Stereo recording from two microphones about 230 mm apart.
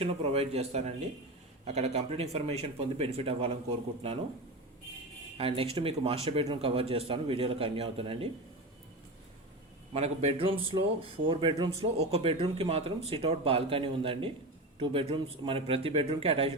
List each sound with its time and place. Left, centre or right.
0.0 s speech: right
5.4 s speech: right
9.9 s speech: right